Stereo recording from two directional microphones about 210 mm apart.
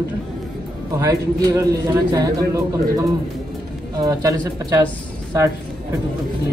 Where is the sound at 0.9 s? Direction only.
15° right (ahead or behind).